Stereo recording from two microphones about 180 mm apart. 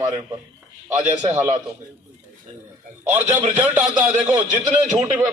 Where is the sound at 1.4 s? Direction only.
20° right (ahead or behind).